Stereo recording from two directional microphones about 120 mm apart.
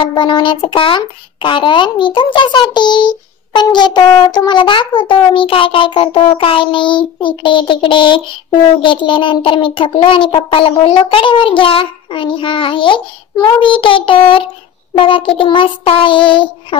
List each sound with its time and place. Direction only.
0.0 s child singing: 40° left (ahead or behind)
0.7 s a child's voice: 45° left (ahead or behind)